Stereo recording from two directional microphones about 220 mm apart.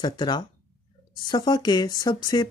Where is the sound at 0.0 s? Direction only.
20° left (ahead or behind).